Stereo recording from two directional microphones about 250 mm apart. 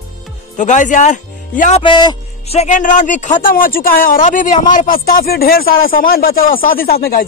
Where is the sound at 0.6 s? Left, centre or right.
Left.